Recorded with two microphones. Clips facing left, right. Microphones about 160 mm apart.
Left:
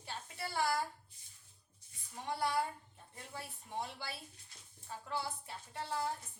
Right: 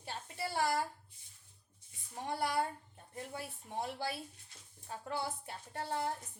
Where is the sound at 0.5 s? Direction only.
50° right (ahead or behind).